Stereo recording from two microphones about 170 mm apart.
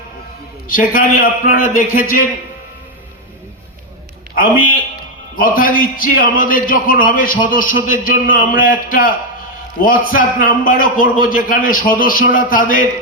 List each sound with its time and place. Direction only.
0.7 s a man's voice: 55° left (ahead or behind)
5.4 s a man's voice: 55° left (ahead or behind)